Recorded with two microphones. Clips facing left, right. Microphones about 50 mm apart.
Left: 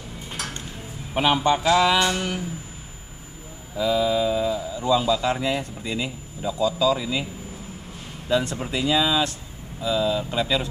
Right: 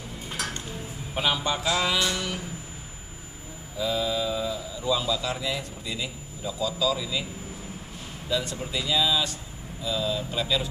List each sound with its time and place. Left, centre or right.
1.1 s a man's voice: left
3.7 s a man's voice: left
8.3 s a man's voice: left